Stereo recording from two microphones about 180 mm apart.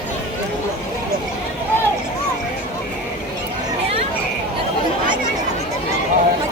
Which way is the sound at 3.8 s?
35° right (ahead or behind).